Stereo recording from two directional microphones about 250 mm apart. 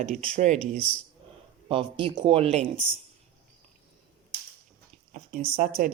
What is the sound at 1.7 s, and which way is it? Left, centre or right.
Speech, centre.